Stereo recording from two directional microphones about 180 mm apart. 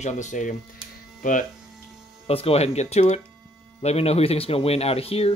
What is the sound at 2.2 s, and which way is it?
Speech, 35° left (ahead or behind).